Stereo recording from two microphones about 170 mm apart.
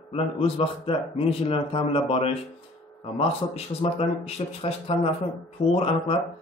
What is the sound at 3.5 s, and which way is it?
Speech, 35° left (ahead or behind).